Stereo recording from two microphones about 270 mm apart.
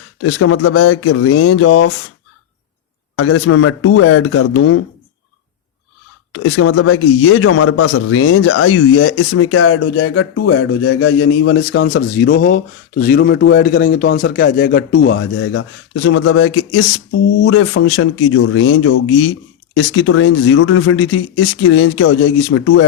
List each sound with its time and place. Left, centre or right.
0.2 s a man's voice: left
3.2 s a man's voice: left
6.3 s a man's voice: left